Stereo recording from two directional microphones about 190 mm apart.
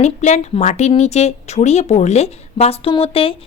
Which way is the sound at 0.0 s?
40° left (ahead or behind).